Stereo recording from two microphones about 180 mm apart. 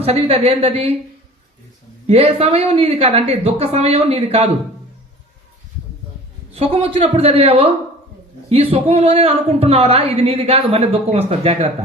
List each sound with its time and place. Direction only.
0.0 s a woman's voice: 35° right (ahead or behind)
2.0 s a woman's voice: 35° right (ahead or behind)
6.5 s a woman's voice: 35° right (ahead or behind)